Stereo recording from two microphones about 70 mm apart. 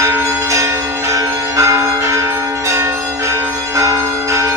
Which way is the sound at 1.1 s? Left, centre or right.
Right.